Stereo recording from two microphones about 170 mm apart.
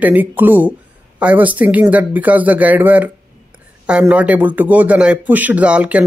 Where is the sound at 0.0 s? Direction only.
10° right (ahead or behind).